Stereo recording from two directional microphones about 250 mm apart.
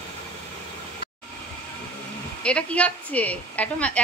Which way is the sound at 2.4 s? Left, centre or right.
Centre.